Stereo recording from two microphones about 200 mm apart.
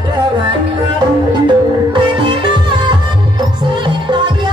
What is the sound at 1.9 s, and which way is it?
Music, 25° right (ahead or behind).